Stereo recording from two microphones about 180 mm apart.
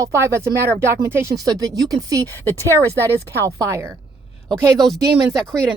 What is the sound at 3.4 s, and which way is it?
Speech, 15° right (ahead or behind).